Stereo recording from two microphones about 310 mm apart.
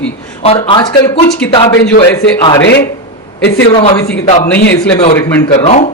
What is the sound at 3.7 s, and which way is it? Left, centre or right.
Speech, centre.